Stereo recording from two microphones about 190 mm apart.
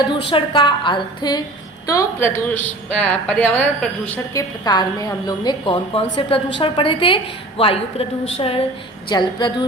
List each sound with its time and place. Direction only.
0.3 s a woman's voice: 25° left (ahead or behind); by 4.4 s 10° left (ahead or behind)
4.6 s a woman's voice: 20° left (ahead or behind)